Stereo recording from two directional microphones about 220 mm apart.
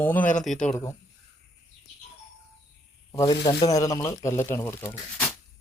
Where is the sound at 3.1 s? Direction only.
15° left (ahead or behind).